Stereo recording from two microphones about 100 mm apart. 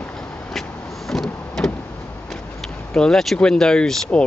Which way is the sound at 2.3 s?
5° left (ahead or behind).